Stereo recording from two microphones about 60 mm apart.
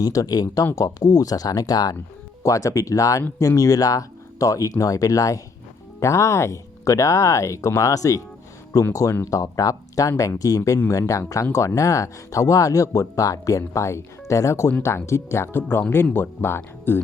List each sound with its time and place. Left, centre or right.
0.0 s speech: left
0.8 s speech: left
2.4 s speech: left
6.0 s speech: left
7.8 s speech: left
8.9 s speech: left
9.3 s speech: left
10.8 s speech: left